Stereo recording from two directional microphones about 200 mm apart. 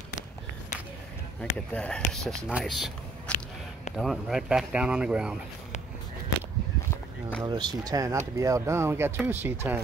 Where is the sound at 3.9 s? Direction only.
Centre (ahead or behind).